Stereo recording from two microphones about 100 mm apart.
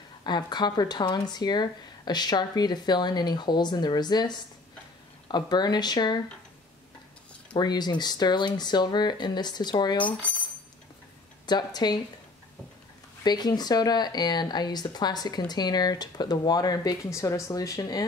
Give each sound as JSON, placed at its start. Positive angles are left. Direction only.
{"t": 0.2, "sound": "speech", "side_deg": 45}
{"t": 7.5, "sound": "speech", "side_deg": 45}
{"t": 11.4, "sound": "speech", "side_deg": 45}
{"t": 13.2, "sound": "speech", "side_deg": 45}